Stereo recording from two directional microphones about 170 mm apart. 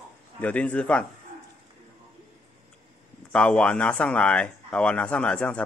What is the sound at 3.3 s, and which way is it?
Speech, 5° left (ahead or behind).